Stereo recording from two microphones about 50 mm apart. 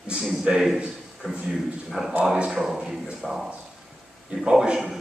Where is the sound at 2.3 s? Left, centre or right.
Centre.